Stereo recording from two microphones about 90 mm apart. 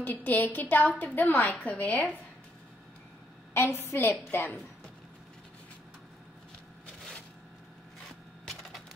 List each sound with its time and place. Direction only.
0.0 s a woman's voice: 20° left (ahead or behind)
3.5 s a woman's voice: 25° left (ahead or behind)